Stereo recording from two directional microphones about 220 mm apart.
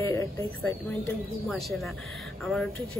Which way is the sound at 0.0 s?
15° left (ahead or behind).